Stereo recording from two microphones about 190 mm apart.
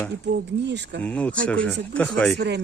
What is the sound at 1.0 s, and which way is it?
Speech, 10° left (ahead or behind).